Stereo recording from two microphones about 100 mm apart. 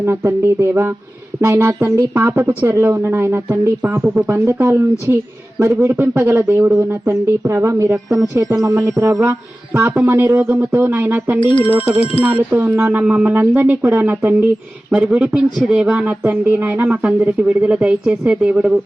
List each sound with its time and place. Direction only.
0.3 s speech: 25° right (ahead or behind)
11.3 s speech: 55° left (ahead or behind)
11.8 s speech: 80° left
12.2 s speech: 15° right (ahead or behind)